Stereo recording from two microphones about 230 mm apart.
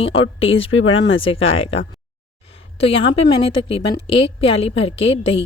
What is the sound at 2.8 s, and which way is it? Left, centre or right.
A woman's voice, left.